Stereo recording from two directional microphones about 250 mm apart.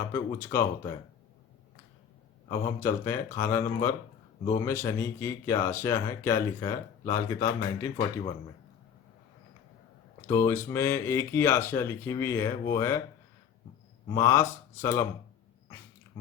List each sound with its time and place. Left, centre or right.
0.0 s speech: centre
2.5 s speech: centre
10.2 s speech: centre
14.2 s speech: centre